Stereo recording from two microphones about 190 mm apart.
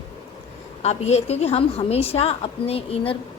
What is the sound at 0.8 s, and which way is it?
A woman's voice, 35° left (ahead or behind).